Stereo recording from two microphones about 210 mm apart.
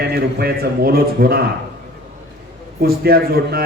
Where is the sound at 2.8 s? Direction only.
45° right (ahead or behind).